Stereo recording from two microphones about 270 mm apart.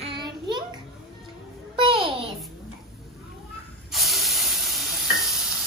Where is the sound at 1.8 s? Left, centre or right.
Centre.